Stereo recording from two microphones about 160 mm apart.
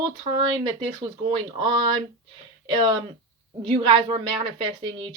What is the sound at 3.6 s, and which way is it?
Speech, 30° right (ahead or behind).